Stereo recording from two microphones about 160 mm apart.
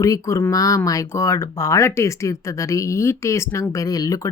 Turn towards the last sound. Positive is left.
turn(degrees=20)  # may be behind; listen again after turning